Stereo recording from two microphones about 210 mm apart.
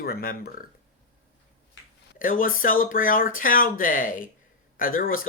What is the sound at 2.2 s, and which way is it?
Speech, 40° left (ahead or behind).